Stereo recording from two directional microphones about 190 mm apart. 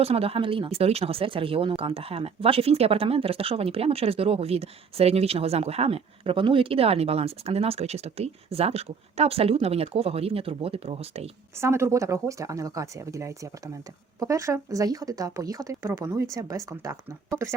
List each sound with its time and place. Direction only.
0.0 s speech: 30° right (ahead or behind)
11.5 s speech: 15° right (ahead or behind)